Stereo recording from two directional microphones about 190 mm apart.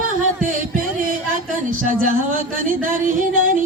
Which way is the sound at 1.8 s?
45° right (ahead or behind).